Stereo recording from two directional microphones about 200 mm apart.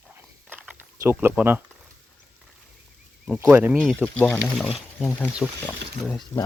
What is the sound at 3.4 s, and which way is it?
Speech, 10° right (ahead or behind).